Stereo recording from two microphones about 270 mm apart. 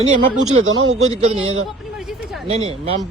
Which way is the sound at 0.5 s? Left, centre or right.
Right.